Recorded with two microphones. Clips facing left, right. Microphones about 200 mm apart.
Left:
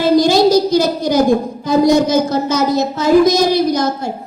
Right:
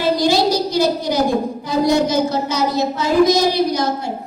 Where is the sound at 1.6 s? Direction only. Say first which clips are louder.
Left 5 dB; 45° left (ahead or behind).